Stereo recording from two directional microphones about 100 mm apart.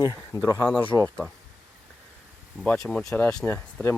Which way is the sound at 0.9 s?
10° left (ahead or behind).